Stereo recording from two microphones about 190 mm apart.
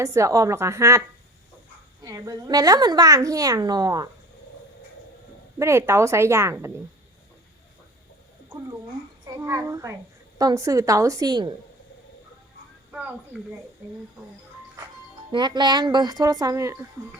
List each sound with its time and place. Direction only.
0.0 s a woman's voice: 15° right (ahead or behind)
5.5 s a woman's voice: 15° right (ahead or behind)
9.3 s a woman's voice: 15° right (ahead or behind)
12.9 s speech: 5° right (ahead or behind)
15.3 s a woman's voice: 25° right (ahead or behind)